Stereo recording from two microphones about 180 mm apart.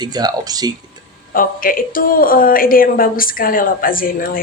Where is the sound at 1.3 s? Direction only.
50° left (ahead or behind).